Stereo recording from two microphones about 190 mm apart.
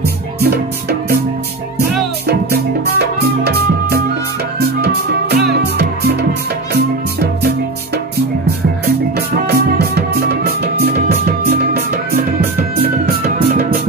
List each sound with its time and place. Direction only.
0.4 s music: 55° right (ahead or behind)
2.2 s music: 55° right (ahead or behind)